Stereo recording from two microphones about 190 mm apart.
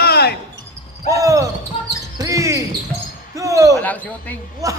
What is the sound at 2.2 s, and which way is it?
Basketball bounce, 15° right (ahead or behind).